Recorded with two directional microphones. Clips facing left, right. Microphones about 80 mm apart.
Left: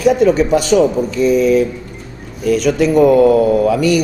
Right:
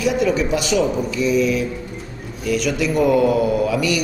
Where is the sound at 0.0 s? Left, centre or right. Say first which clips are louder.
Left 7 dB; left.